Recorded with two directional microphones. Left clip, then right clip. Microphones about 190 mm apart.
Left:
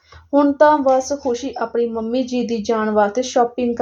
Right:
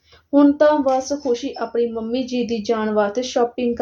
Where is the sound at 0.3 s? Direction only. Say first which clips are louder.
Left 1 dB; 35° left (ahead or behind).